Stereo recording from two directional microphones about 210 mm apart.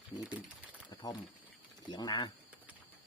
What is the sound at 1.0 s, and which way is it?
Speech, 20° left (ahead or behind).